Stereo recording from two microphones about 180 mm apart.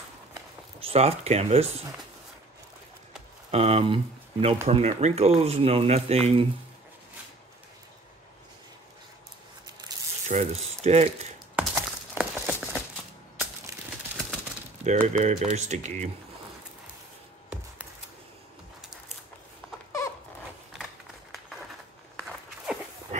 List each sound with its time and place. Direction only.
0.3 s zipper: 30° right (ahead or behind)
3.5 s speech: 35° right (ahead or behind)
10.2 s speech: 35° right (ahead or behind)
11.5 s a sound: 5° right (ahead or behind)
14.9 s speech: 40° right (ahead or behind)